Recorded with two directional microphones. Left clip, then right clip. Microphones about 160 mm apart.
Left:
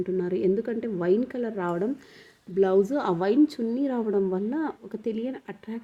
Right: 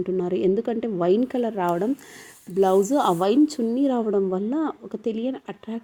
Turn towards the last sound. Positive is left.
turn(degrees=-10)  # may be behind; listen again after turning